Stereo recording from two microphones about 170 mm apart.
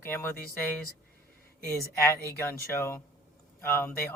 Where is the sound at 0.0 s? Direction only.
15° left (ahead or behind).